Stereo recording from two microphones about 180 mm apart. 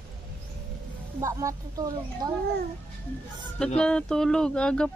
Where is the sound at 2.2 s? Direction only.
20° right (ahead or behind).